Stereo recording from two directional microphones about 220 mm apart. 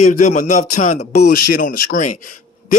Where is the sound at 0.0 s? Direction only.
35° left (ahead or behind).